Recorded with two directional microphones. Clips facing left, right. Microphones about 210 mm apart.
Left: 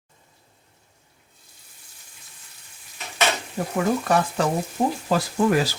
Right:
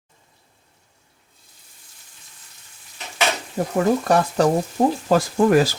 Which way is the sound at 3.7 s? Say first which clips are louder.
Right 3 dB; 40° right (ahead or behind).